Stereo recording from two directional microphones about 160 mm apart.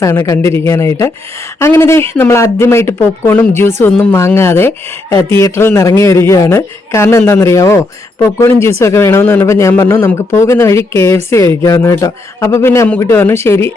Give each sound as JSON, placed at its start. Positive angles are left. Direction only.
{"t": 0.0, "sound": "speech", "side_deg": 20}